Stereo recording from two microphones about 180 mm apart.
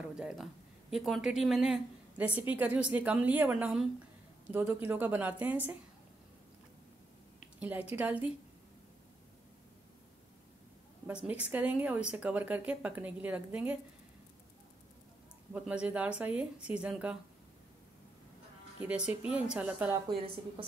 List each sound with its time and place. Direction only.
0.1 s speech: 5° right (ahead or behind)
7.9 s speech: 10° right (ahead or behind)
11.1 s speech: 5° right (ahead or behind)
15.5 s speech: 5° right (ahead or behind)
18.8 s a woman's voice: 5° right (ahead or behind)
19.9 s a woman's voice: 25° right (ahead or behind)